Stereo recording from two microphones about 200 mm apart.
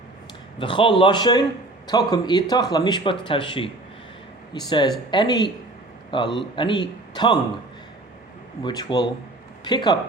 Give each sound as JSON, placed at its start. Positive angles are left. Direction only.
{"t": 0.6, "sound": "a man's voice", "side_deg": 25}
{"t": 8.6, "sound": "speech", "side_deg": 20}